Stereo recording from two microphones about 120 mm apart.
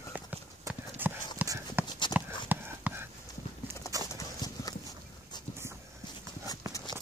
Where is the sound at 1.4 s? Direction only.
30° right (ahead or behind).